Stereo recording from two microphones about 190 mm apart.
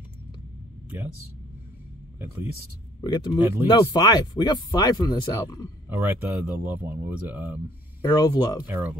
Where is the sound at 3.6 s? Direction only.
25° left (ahead or behind).